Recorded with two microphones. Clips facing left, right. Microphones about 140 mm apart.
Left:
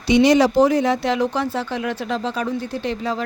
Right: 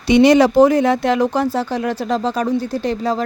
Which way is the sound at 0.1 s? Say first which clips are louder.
Right 3 dB; 60° right (ahead or behind).